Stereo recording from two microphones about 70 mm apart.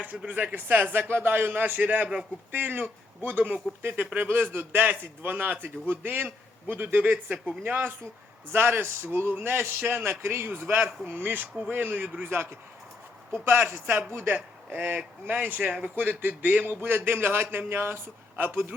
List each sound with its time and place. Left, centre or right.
0.0 s a man's voice: right
12.2 s a man's voice: right